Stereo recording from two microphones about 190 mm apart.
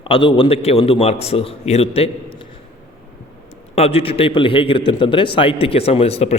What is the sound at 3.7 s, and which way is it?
A man's voice, 30° left (ahead or behind).